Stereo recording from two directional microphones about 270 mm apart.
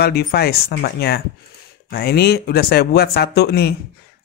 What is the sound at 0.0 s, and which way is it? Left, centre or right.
Speech, left.